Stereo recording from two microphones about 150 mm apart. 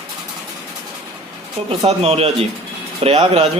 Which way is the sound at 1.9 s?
40° right (ahead or behind).